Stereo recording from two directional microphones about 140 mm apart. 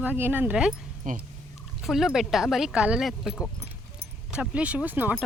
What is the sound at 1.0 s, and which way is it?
Speech, 65° right (ahead or behind).